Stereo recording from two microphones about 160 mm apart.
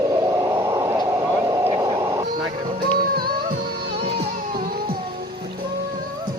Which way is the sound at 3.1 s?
70° right (ahead or behind).